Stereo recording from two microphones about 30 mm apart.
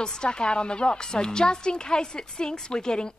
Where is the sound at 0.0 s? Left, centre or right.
Left.